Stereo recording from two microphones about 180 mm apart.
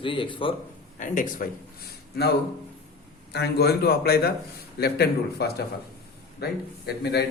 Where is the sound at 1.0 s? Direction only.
45° left (ahead or behind).